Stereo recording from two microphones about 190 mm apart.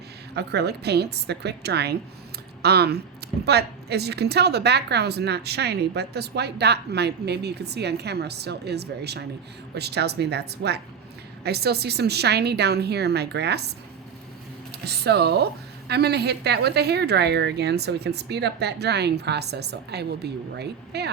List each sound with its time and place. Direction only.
0.3 s a woman's voice: 60° right (ahead or behind)